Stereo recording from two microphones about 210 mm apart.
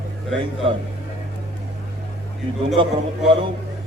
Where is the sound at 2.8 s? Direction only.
25° right (ahead or behind).